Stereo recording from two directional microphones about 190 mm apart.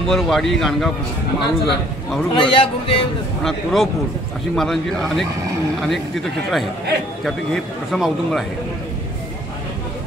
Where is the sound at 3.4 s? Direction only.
Centre (ahead or behind).